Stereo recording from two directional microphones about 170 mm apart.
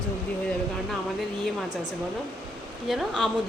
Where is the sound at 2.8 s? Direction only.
Centre (ahead or behind).